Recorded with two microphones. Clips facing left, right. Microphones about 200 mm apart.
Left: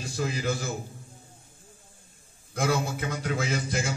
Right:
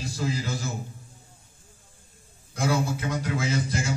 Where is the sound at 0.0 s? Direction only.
55° left (ahead or behind).